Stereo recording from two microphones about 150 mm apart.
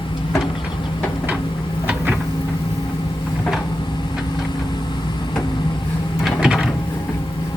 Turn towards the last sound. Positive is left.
turn(degrees=0)  # may be behind; listen again after turning